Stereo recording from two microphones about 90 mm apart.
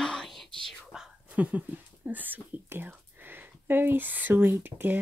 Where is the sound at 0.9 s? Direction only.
10° right (ahead or behind).